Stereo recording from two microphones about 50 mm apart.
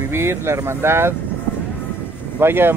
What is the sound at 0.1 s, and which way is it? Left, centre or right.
Speech, right.